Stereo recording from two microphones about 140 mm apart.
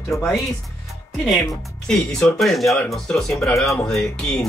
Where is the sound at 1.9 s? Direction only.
5° left (ahead or behind).